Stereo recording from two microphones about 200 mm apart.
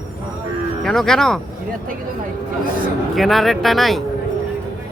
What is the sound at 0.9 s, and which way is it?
Speech, centre (ahead or behind).